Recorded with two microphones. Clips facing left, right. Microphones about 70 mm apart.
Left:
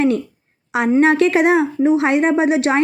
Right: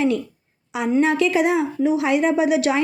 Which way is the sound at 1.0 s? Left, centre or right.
Left.